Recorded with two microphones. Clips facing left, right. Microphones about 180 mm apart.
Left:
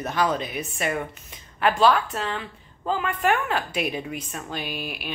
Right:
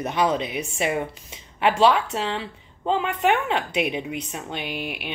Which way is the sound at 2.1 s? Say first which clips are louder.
Right 3 dB; 25° right (ahead or behind).